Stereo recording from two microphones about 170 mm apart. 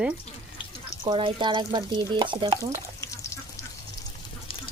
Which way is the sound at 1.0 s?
30° right (ahead or behind).